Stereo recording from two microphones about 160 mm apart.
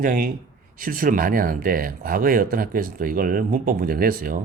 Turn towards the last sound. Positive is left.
turn(degrees=-65)  # may be behind; listen again after turning